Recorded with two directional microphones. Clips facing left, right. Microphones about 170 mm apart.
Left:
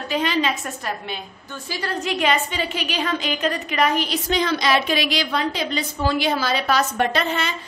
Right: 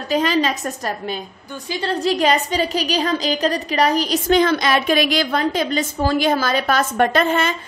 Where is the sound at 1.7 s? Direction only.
25° right (ahead or behind).